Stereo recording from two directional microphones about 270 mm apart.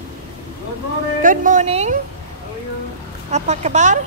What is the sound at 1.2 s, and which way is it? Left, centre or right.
Speech, right.